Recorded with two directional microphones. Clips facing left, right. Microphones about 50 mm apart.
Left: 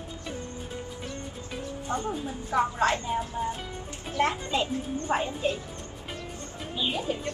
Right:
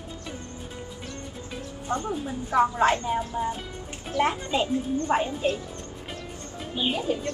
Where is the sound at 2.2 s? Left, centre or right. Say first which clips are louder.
Right 6 dB; right.